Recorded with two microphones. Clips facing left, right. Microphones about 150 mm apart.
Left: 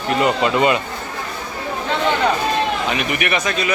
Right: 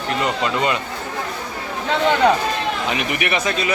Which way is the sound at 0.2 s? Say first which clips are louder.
Left 5 dB; 10° left (ahead or behind).